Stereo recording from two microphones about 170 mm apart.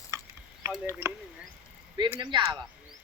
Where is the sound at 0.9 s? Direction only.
15° right (ahead or behind).